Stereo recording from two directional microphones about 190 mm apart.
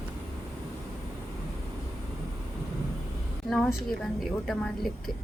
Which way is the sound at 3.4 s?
Centre (ahead or behind).